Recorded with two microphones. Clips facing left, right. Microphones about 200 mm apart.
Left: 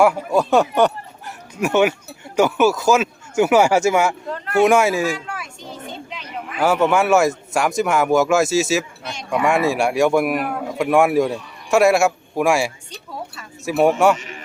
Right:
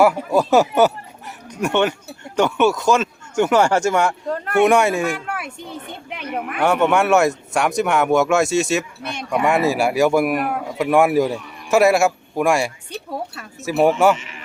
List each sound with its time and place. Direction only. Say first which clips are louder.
0.0 s speech: even; centre (ahead or behind)
1.6 s speech: left 2 dB; 5° left (ahead or behind)
5.1 s a woman's voice: right 2 dB; 60° right (ahead or behind)
6.6 s speech: even; centre (ahead or behind)
14.2 s speech: left 3 dB; 35° left (ahead or behind)